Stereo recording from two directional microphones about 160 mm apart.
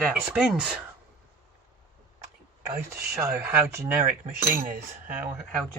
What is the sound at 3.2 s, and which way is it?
Speech, 20° right (ahead or behind).